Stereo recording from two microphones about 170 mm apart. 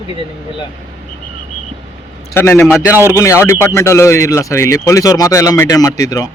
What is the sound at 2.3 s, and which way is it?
A man's voice, 15° left (ahead or behind).